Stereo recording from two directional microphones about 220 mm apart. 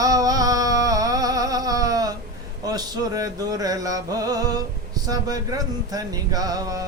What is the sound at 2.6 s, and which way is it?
Speech, 15° right (ahead or behind).